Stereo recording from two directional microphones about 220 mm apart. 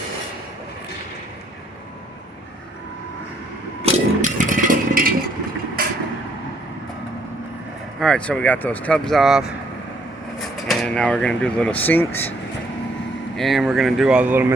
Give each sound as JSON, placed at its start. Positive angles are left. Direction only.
{"t": 3.8, "sound": "vehicle", "side_deg": -35}
{"t": 7.9, "sound": "speech", "side_deg": 5}
{"t": 13.3, "sound": "speech", "side_deg": 0}